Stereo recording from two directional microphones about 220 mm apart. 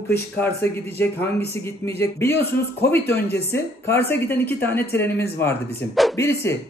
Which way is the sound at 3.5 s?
10° left (ahead or behind).